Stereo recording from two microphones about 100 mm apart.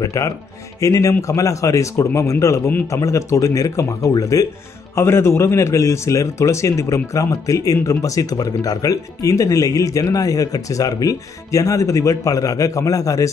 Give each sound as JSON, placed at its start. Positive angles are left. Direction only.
{"t": 0.0, "sound": "speech", "side_deg": 30}